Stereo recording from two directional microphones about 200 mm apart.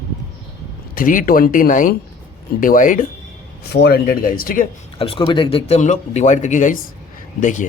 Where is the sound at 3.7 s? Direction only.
55° left (ahead or behind).